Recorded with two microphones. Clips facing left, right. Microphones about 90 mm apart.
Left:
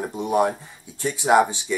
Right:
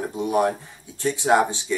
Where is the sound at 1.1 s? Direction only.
15° left (ahead or behind).